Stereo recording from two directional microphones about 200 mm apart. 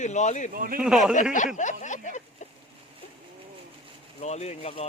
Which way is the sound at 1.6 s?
40° left (ahead or behind).